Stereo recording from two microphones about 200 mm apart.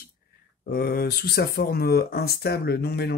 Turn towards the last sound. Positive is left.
turn(degrees=55)  # may be behind; listen again after turning